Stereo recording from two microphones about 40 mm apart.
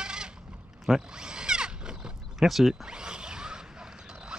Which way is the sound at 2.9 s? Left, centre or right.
Right.